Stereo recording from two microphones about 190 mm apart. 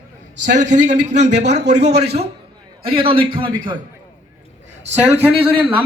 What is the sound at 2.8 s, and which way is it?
Speech, 30° right (ahead or behind).